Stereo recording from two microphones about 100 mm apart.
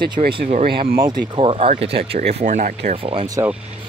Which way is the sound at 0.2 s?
90° right.